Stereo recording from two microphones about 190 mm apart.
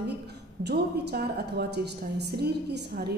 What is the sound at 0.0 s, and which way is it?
A woman's voice, 60° right (ahead or behind).